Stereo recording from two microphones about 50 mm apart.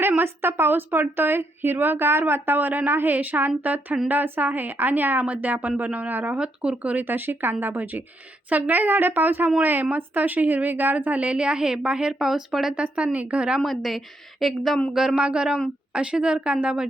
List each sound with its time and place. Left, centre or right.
0.2 s speech: right
6.3 s a woman's voice: right
7.0 s a woman's voice: right; by 12.3 s centre
12.3 s speech: centre
12.7 s a woman's voice: right
13.6 s a woman's voice: centre
15.1 s a woman's voice: centre